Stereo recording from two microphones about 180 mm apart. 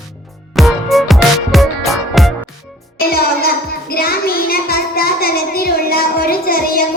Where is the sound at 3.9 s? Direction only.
55° left (ahead or behind).